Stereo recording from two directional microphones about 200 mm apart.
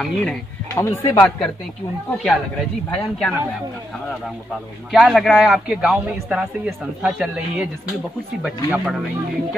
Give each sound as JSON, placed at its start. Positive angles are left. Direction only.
{"t": 0.0, "sound": "a man's voice", "side_deg": 5}
{"t": 0.7, "sound": "speech", "side_deg": 15}
{"t": 2.9, "sound": "a man's voice", "side_deg": 5}
{"t": 4.9, "sound": "a man's voice", "side_deg": 0}
{"t": 8.6, "sound": "a man's voice", "side_deg": -5}